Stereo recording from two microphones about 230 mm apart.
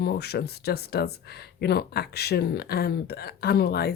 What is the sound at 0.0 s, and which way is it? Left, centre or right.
Speech, left.